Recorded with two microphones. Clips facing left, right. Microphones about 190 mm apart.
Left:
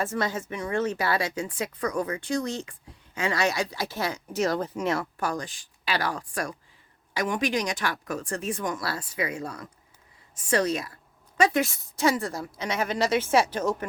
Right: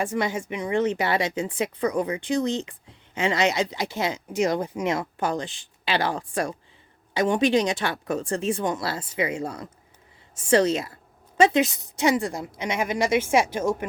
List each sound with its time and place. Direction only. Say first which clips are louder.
0.0 s a woman's voice: right 2 dB; 15° right (ahead or behind)